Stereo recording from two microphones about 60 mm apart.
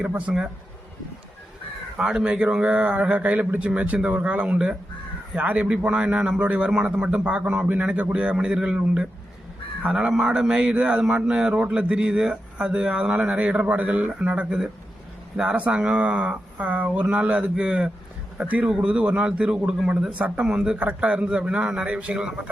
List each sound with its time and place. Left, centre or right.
0.1 s a man's voice: right
2.0 s a man's voice: centre
18.6 s a man's voice: centre